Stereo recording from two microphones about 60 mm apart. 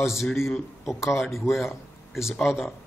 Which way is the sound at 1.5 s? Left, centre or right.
Left.